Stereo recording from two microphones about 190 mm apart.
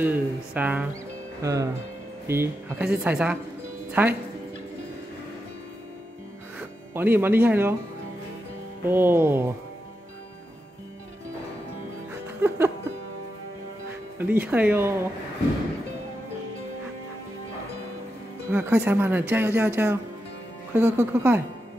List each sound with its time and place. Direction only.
0.0 s speech: 10° right (ahead or behind)
6.9 s speech: 10° right (ahead or behind)
8.8 s speech: 10° right (ahead or behind)
12.4 s speech: 15° right (ahead or behind)
14.1 s speech: 10° right (ahead or behind)
18.5 s speech: 10° right (ahead or behind)